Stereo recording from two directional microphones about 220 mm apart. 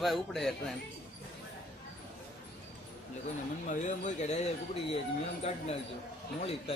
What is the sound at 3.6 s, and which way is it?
Speech, 35° left (ahead or behind).